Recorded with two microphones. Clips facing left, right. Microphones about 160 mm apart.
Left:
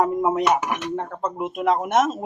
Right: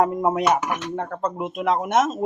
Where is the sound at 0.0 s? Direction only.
Centre (ahead or behind).